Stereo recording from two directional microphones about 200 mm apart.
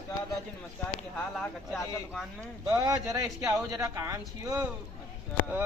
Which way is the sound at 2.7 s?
15° right (ahead or behind).